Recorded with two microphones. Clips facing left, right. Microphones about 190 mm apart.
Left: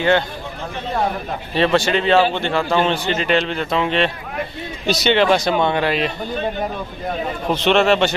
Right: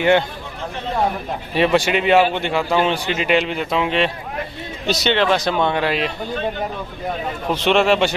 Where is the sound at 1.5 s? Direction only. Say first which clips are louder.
Even; 10° right (ahead or behind).